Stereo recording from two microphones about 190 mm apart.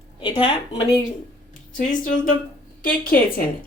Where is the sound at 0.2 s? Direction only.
30° left (ahead or behind).